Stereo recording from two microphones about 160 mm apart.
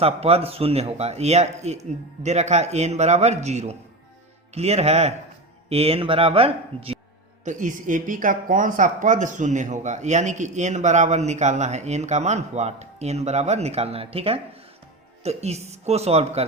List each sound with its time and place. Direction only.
0.0 s a man's voice: 40° right (ahead or behind)
7.4 s a man's voice: 55° right (ahead or behind)